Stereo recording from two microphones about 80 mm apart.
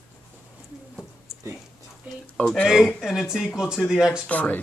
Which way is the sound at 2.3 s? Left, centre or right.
Centre.